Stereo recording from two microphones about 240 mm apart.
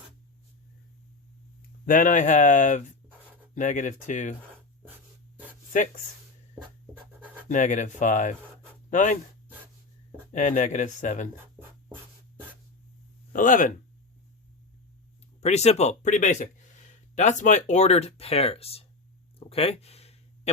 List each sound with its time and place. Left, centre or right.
1.8 s speech: left
7.4 s speech: left
10.3 s speech: left
13.3 s speech: left
15.4 s speech: left
19.4 s a sound: left